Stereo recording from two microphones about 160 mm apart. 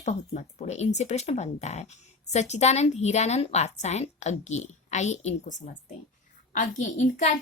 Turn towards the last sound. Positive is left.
turn(degrees=50)  # may be behind; listen again after turning